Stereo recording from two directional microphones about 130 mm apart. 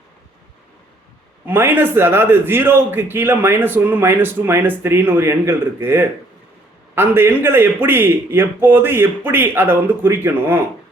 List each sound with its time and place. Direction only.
1.5 s a man's voice: 15° right (ahead or behind)